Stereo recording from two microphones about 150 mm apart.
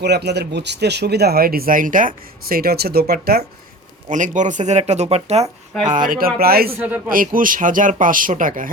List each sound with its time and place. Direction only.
0.0 s speech: 90° right
4.1 s speech: 55° right (ahead or behind)
6.1 s speech: 75° right (ahead or behind)
6.4 s speech: 90° right
6.7 s a man's voice: 10° right (ahead or behind)
7.1 s speech: 65° right (ahead or behind)